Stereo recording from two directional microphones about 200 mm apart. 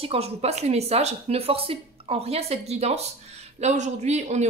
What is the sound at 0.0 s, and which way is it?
Speech, 30° right (ahead or behind).